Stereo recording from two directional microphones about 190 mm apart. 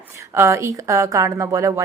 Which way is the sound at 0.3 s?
15° right (ahead or behind).